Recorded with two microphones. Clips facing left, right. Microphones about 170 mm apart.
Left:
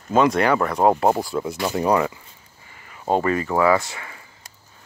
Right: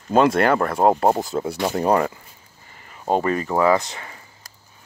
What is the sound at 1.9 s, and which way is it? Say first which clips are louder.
Speech: even; 40° right (ahead or behind).